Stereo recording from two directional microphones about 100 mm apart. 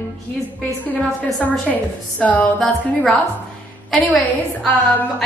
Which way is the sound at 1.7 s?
15° left (ahead or behind).